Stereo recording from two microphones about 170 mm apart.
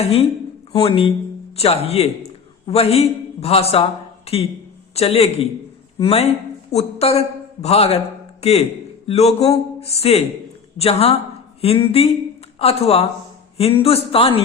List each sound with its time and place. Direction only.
0.7 s a man's voice: 30° left (ahead or behind)